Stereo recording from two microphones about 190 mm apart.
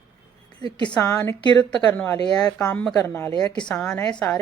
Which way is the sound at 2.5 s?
5° left (ahead or behind).